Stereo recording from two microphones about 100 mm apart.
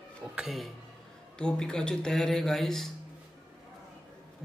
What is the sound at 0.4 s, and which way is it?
Speech, centre (ahead or behind).